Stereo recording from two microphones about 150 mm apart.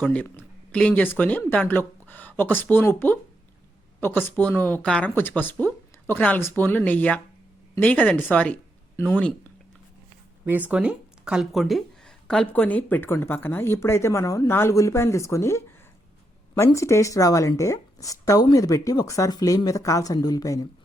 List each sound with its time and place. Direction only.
0.0 s speech: 10° left (ahead or behind)
4.3 s speech: 15° left (ahead or behind)
10.4 s a woman's voice: 10° right (ahead or behind); by 20.7 s 25° left (ahead or behind)